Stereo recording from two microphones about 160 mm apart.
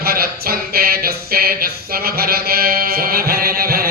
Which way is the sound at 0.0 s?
70° right (ahead or behind).